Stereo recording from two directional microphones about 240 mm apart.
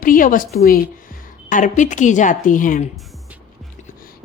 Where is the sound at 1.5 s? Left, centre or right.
Left.